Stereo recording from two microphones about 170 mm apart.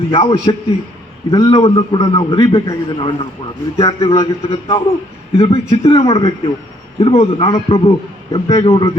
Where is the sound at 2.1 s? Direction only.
30° left (ahead or behind).